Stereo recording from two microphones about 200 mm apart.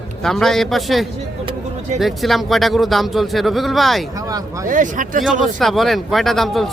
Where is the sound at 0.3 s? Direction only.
Centre (ahead or behind).